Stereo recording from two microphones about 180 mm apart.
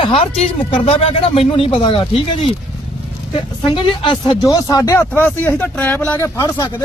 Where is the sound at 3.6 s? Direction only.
25° left (ahead or behind).